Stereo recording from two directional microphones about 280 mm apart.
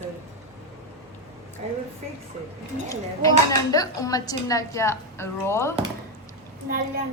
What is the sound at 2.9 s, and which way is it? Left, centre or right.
Speech, centre.